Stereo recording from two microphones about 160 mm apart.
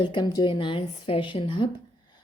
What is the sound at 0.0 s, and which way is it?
A woman's voice, 30° left (ahead or behind).